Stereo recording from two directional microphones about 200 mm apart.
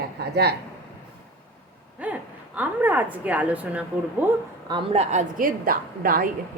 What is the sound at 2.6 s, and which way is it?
A woman's voice, 10° right (ahead or behind).